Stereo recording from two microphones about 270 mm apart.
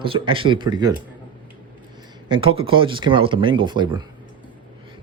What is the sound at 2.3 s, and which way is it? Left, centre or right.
Speech, centre.